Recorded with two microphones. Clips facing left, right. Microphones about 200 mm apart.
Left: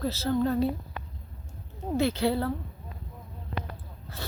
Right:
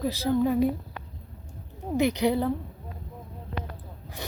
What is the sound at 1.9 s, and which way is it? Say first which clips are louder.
Speech: right 2 dB; 15° right (ahead or behind).